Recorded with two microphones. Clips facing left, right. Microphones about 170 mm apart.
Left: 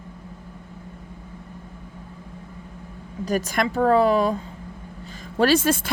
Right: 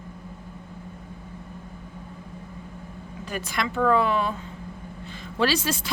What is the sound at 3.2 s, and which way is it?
Speech, 40° left (ahead or behind).